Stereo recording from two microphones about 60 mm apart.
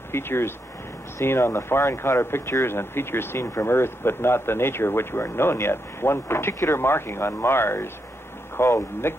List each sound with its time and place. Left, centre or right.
0.1 s speech: left